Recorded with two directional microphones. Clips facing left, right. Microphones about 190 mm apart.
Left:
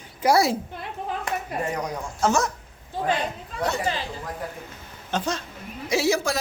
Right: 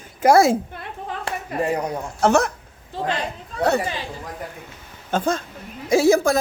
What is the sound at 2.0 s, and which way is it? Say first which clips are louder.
Speech: right 5 dB; 60° right (ahead or behind).